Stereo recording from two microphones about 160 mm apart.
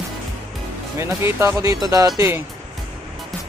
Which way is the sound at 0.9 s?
15° right (ahead or behind).